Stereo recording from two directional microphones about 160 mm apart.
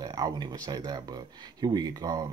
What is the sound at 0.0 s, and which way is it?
Speech, 25° right (ahead or behind).